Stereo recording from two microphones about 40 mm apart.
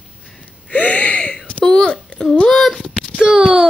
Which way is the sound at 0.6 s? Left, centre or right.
Left.